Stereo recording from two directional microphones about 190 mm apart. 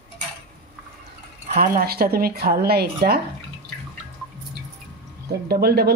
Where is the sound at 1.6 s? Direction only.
55° right (ahead or behind).